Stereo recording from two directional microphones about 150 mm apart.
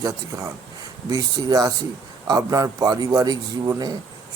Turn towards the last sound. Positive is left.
turn(degrees=-25)  # may be behind; listen again after turning